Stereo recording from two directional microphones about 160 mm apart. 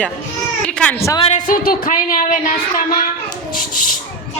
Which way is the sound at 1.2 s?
50° left (ahead or behind).